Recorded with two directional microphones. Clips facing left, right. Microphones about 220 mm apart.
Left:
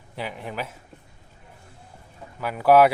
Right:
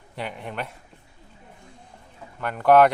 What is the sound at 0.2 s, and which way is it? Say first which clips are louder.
Speech: even; centre (ahead or behind).